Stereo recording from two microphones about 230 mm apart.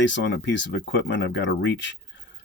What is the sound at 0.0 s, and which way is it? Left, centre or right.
Speech, left.